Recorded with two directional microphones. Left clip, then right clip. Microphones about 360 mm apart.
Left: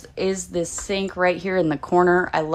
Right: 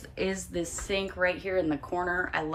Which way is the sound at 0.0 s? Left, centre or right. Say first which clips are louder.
Left 7 dB; centre.